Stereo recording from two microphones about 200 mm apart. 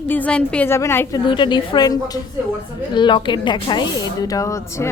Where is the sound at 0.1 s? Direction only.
5° left (ahead or behind).